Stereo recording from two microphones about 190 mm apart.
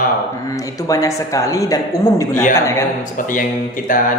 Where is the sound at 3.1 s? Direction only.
45° left (ahead or behind).